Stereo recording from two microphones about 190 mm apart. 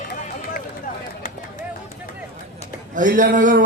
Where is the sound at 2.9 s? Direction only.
45° right (ahead or behind).